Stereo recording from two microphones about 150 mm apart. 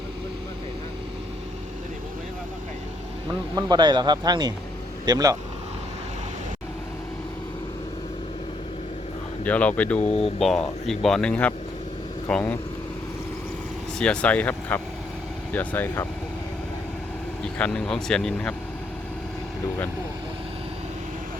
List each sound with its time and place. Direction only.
3.5 s speech: 30° right (ahead or behind)
9.4 s speech: 10° left (ahead or behind)
10.0 s speech: 45° left (ahead or behind)
10.8 s speech: centre (ahead or behind)
14.0 s speech: 5° left (ahead or behind)
17.4 s speech: 5° left (ahead or behind)